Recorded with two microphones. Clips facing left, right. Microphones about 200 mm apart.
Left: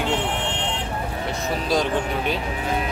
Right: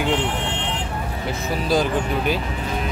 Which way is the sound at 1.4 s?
Centre (ahead or behind).